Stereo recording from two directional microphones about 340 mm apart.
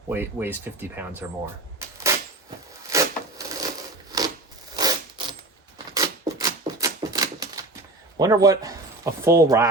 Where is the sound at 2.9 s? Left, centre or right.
Centre.